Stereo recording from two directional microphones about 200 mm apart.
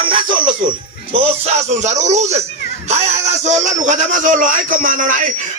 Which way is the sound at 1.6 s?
35° right (ahead or behind).